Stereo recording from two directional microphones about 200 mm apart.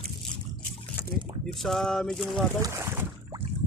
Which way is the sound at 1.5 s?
Centre (ahead or behind).